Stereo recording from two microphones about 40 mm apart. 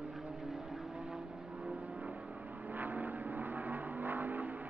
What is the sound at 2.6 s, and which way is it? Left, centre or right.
Vehicle, right.